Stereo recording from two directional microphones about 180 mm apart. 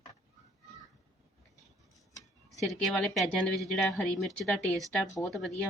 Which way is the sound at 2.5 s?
Centre (ahead or behind).